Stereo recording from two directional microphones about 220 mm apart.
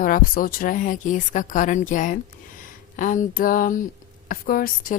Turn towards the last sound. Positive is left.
turn(degrees=40)  # may be behind; listen again after turning